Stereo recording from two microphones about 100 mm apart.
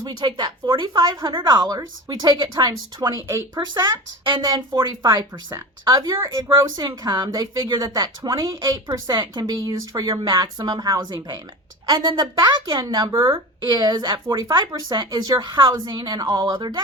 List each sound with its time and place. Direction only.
0.0 s a woman's voice: 50° right (ahead or behind)
3.2 s a woman's voice: 30° right (ahead or behind); by 16.8 s 50° right (ahead or behind)